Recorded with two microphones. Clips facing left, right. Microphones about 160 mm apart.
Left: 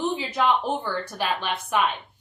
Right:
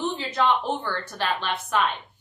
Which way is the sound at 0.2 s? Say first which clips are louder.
Even; 10° left (ahead or behind).